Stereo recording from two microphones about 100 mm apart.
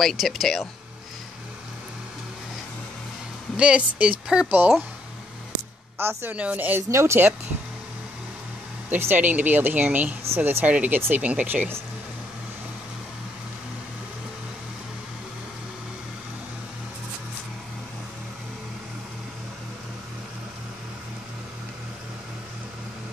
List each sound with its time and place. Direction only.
0.0 s speech: centre (ahead or behind)
3.5 s speech: 10° right (ahead or behind)
5.9 s speech: 20° right (ahead or behind)
6.9 s speech: 30° right (ahead or behind)
8.9 s speech: 20° right (ahead or behind)